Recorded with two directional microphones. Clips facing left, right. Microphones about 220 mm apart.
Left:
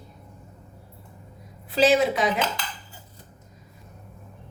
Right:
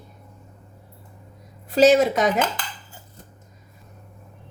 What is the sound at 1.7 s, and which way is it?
Speech, 45° right (ahead or behind).